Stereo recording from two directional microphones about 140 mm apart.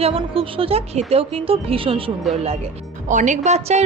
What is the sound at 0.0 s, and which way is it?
Speech, 45° right (ahead or behind).